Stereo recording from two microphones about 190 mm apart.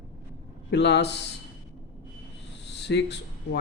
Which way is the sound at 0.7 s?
65° left (ahead or behind).